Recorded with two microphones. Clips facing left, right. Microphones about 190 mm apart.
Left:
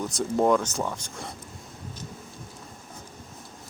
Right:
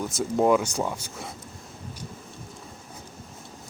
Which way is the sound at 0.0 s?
5° right (ahead or behind).